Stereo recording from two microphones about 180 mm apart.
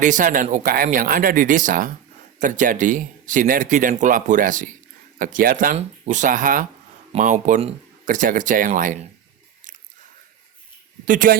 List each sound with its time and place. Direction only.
0.0 s speech: 45° right (ahead or behind)
11.0 s a man's voice: 45° right (ahead or behind)